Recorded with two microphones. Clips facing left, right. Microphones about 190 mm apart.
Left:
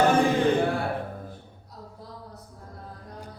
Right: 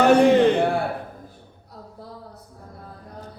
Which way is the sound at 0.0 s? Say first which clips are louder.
Right 6 dB; 70° right (ahead or behind).